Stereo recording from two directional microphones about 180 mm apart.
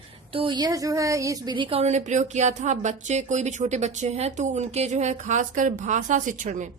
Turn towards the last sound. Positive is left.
turn(degrees=-45)  # may be behind; listen again after turning